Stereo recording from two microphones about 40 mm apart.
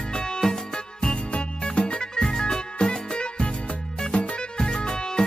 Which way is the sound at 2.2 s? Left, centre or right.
Centre.